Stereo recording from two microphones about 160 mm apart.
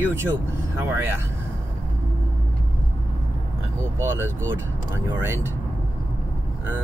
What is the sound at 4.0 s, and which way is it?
Speech, 15° right (ahead or behind).